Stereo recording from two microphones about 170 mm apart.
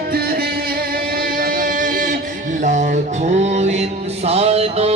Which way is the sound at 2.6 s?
50° right (ahead or behind).